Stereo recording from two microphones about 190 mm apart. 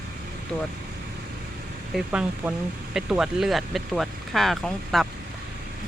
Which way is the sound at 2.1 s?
5° right (ahead or behind).